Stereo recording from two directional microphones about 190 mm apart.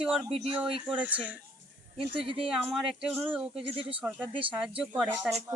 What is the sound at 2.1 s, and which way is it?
Speech, 30° right (ahead or behind).